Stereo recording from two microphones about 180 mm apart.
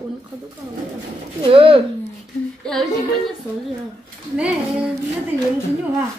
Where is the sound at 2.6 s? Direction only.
5° left (ahead or behind).